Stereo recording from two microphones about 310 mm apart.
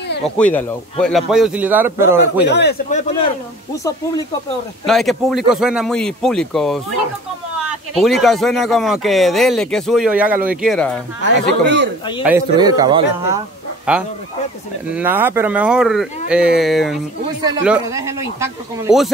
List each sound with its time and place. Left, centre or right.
0.4 s speech: centre
2.4 s speech: left
3.7 s speech: centre
11.2 s speech: right
12.2 s speech: centre
14.9 s speech: centre